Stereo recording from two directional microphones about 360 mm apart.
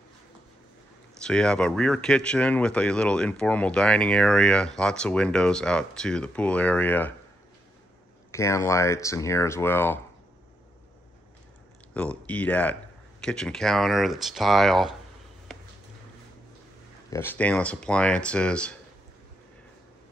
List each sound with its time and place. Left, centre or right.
1.2 s speech: centre
8.3 s speech: centre
11.9 s speech: centre
17.1 s speech: centre